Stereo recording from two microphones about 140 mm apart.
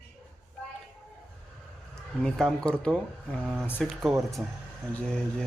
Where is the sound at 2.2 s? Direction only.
5° left (ahead or behind).